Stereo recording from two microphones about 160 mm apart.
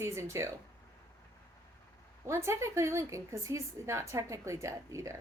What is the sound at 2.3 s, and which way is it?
A woman's voice, 15° right (ahead or behind).